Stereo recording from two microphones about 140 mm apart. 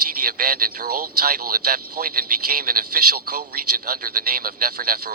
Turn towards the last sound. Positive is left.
turn(degrees=-90)